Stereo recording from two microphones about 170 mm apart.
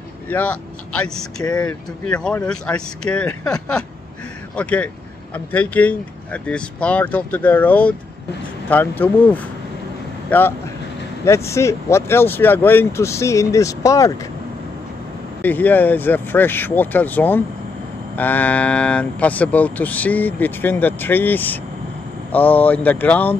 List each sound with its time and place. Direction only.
0.3 s speech: 10° left (ahead or behind)
4.6 s speech: 10° left (ahead or behind)
15.4 s speech: 10° left (ahead or behind)